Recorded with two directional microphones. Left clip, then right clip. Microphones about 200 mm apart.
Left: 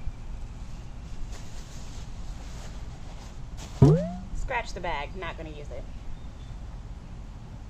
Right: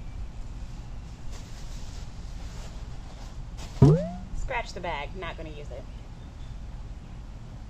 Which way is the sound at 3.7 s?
Centre (ahead or behind).